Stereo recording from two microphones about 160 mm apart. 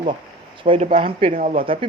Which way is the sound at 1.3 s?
55° right (ahead or behind).